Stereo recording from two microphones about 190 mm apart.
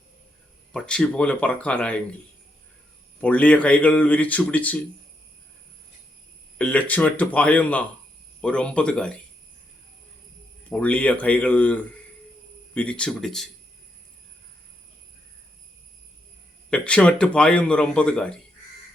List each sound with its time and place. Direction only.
0.7 s speech: 5° left (ahead or behind)
3.2 s a man's voice: 5° left (ahead or behind)
6.6 s a man's voice: 5° left (ahead or behind)
10.7 s a man's voice: 5° left (ahead or behind)
16.6 s speech: 5° left (ahead or behind)